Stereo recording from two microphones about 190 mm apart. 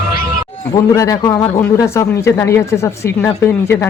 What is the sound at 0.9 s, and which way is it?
Speech, 15° left (ahead or behind).